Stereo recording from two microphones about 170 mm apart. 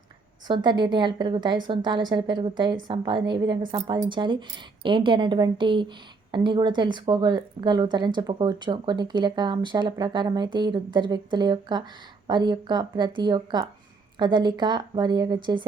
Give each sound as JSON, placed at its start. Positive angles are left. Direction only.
{"t": 0.4, "sound": "a woman's voice", "side_deg": -25}